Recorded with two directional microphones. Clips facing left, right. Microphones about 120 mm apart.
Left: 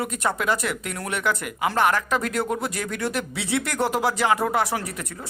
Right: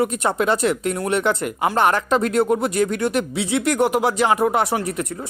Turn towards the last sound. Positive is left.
turn(degrees=-25)  # may be behind; listen again after turning